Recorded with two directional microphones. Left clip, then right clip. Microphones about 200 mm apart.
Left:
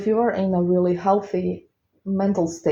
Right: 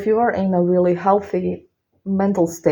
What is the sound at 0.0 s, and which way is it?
Speech, 40° right (ahead or behind).